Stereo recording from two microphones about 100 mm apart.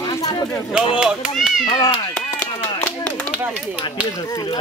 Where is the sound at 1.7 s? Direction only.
45° left (ahead or behind).